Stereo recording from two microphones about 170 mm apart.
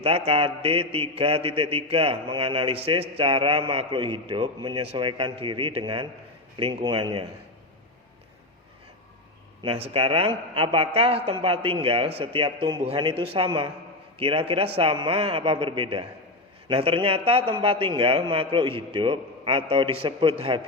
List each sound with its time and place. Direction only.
0.0 s mantra: 35° right (ahead or behind)
9.6 s mantra: 35° right (ahead or behind)